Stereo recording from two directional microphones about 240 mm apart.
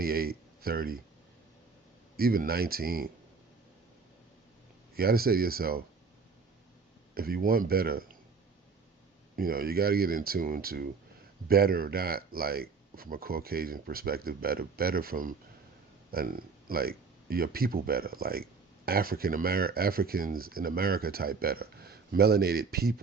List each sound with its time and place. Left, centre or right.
0.0 s speech: right
2.1 s speech: right
4.9 s speech: right
7.1 s speech: right
9.3 s speech: right